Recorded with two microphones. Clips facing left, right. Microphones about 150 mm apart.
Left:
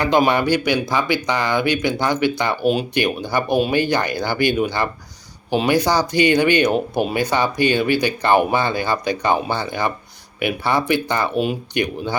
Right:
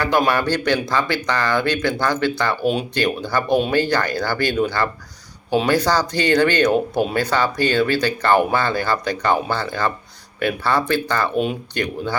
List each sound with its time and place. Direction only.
0.3 s speech: 15° left (ahead or behind)